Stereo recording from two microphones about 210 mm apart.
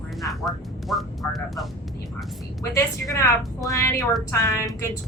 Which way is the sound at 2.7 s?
15° left (ahead or behind).